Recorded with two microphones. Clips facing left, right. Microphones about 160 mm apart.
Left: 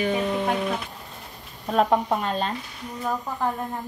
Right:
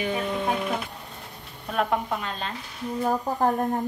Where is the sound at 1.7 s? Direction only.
35° left (ahead or behind).